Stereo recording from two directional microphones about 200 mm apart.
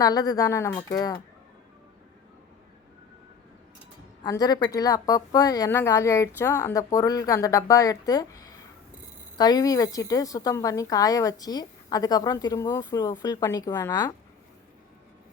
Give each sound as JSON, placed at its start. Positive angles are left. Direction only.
{"t": 0.0, "sound": "speech", "side_deg": 20}
{"t": 4.2, "sound": "a woman's voice", "side_deg": 20}